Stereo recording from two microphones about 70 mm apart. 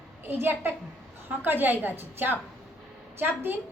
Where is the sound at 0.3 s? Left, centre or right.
Right.